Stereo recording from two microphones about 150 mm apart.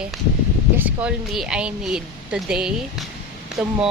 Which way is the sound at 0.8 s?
10° right (ahead or behind).